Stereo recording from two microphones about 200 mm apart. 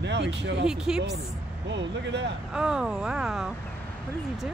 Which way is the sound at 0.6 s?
5° right (ahead or behind).